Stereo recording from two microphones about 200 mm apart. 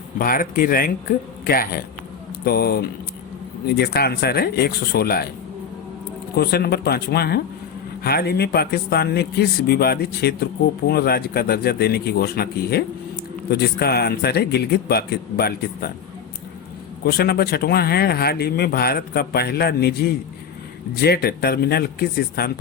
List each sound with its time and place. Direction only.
0.2 s speech: 45° left (ahead or behind)
6.3 s speech: 50° left (ahead or behind)
17.0 s speech: 50° left (ahead or behind)